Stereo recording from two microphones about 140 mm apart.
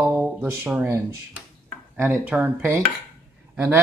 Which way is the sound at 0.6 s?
15° right (ahead or behind).